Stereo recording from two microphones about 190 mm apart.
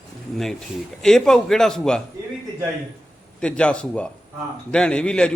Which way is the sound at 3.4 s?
5° left (ahead or behind).